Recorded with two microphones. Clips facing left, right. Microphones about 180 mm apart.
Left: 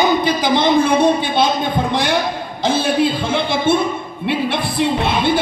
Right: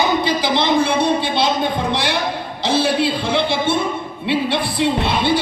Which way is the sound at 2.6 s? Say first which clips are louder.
Left 1 dB; 50° left (ahead or behind).